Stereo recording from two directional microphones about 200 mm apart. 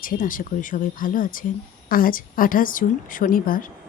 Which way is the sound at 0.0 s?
45° left (ahead or behind).